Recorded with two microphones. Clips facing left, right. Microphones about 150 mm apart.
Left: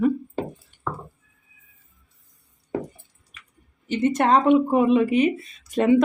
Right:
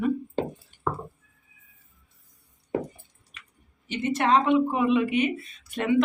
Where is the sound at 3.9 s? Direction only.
45° left (ahead or behind).